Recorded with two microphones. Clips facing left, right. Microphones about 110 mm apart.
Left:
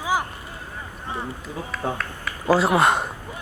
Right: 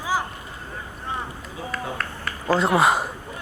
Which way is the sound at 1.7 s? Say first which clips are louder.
Left 2 dB; centre (ahead or behind).